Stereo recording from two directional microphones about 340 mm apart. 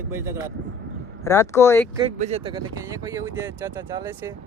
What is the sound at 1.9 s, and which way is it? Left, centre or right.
Speech, centre.